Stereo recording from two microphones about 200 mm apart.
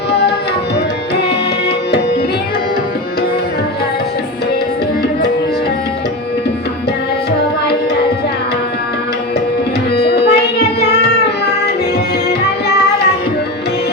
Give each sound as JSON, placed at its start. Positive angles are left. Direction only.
{"t": 0.1, "sound": "tabla", "side_deg": 55}
{"t": 9.9, "sound": "music", "side_deg": 55}